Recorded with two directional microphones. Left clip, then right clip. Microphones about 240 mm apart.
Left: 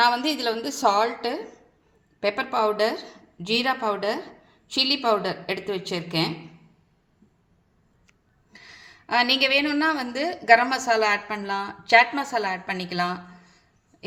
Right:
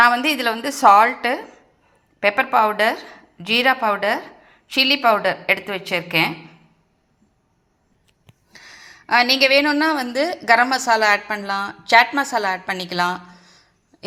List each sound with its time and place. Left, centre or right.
0.0 s a woman's voice: centre
9.4 s a woman's voice: centre